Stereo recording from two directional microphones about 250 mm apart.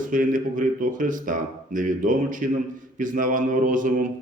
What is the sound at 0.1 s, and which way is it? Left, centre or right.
Speech, right.